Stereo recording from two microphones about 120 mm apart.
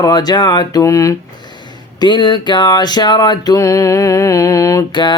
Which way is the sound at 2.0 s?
40° left (ahead or behind).